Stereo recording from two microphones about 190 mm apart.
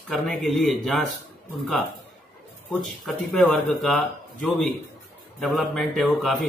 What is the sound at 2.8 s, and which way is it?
Speech, centre (ahead or behind).